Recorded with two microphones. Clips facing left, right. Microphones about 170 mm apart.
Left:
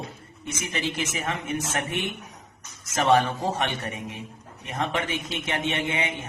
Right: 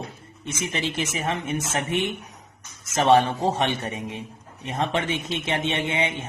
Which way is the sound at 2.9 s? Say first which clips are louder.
Right 3 dB; 25° right (ahead or behind).